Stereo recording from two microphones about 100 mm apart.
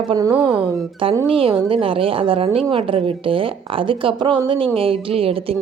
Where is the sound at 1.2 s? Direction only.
65° right (ahead or behind).